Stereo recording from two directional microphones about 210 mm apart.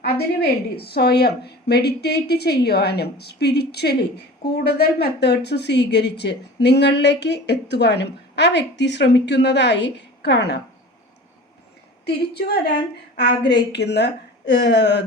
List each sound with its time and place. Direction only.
0.8 s speech: 50° left (ahead or behind)
12.0 s speech: 50° left (ahead or behind)